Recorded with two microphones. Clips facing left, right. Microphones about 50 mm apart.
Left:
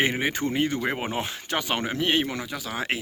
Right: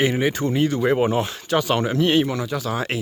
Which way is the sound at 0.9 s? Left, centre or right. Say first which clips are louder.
Right 9 dB; centre.